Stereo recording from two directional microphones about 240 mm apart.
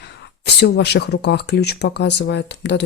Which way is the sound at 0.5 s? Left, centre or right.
Left.